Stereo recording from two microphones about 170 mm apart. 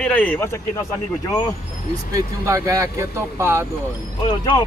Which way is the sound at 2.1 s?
20° right (ahead or behind).